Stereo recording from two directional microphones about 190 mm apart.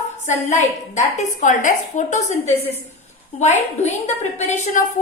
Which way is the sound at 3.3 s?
35° left (ahead or behind).